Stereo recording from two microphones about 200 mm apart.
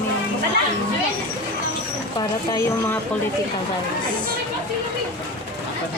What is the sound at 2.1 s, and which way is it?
Speech, 20° left (ahead or behind).